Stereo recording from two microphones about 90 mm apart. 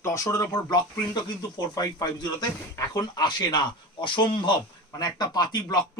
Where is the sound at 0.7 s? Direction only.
50° left (ahead or behind).